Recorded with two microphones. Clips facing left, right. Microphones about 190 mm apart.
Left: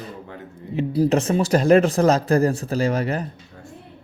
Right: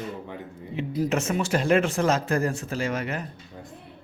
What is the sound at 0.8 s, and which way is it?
Speech, 35° left (ahead or behind).